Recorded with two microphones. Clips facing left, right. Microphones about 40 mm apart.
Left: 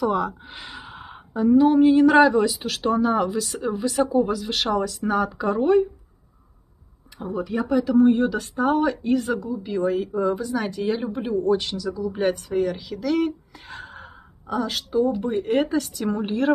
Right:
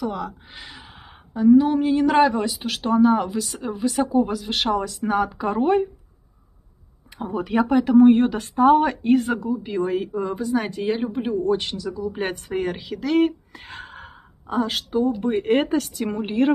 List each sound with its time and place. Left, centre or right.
0.0 s speech: centre; by 5.9 s right
7.4 s speech: right; by 11.5 s centre
11.5 s speech: right
12.2 s speech: right
16.1 s speech: centre